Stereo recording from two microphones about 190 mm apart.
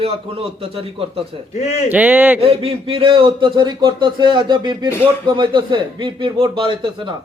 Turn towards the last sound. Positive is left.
turn(degrees=-25)  # may be behind; listen again after turning